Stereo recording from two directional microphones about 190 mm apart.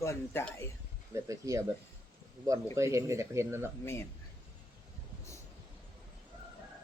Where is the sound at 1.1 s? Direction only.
15° right (ahead or behind).